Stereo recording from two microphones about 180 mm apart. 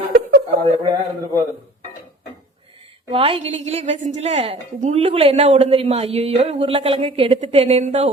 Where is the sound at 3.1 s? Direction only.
30° right (ahead or behind).